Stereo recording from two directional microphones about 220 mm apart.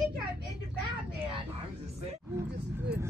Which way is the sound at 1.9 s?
30° right (ahead or behind).